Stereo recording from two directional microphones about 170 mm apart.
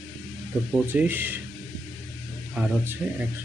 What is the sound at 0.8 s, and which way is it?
Speech, 10° right (ahead or behind).